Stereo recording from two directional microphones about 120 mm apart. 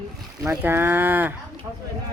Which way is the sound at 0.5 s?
15° right (ahead or behind).